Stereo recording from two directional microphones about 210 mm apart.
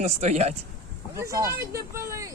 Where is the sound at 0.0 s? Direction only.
35° right (ahead or behind).